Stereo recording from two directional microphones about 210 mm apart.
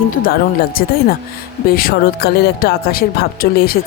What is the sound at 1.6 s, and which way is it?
Speech, 45° left (ahead or behind).